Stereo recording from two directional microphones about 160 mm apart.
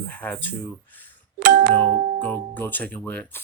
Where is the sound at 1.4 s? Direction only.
60° right (ahead or behind).